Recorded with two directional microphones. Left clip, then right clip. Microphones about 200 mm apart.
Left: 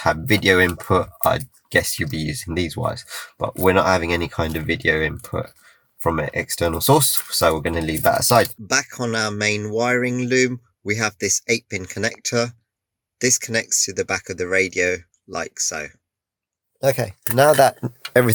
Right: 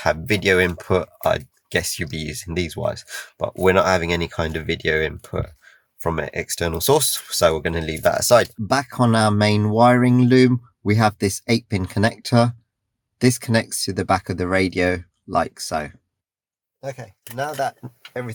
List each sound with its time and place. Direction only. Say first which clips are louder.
0.0 s speech: left 2 dB; 45° right (ahead or behind)
8.6 s speech: right 2 dB; 10° right (ahead or behind)
16.8 s speech: left 13 dB; 45° left (ahead or behind)